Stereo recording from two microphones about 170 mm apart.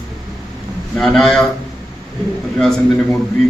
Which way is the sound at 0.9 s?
Centre (ahead or behind).